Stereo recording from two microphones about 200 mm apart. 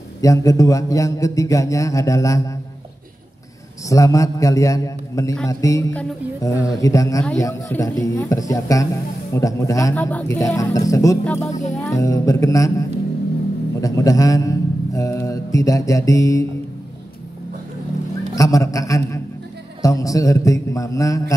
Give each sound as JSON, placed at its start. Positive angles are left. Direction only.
{"t": 0.2, "sound": "a man's voice", "side_deg": 15}
{"t": 3.9, "sound": "a man's voice", "side_deg": 15}
{"t": 18.3, "sound": "a sound", "side_deg": 15}
{"t": 19.8, "sound": "a man's voice", "side_deg": 15}